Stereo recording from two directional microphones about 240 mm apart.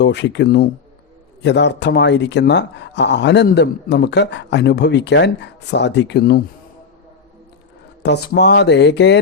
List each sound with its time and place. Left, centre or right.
0.0 s speech: left
8.0 s speech: left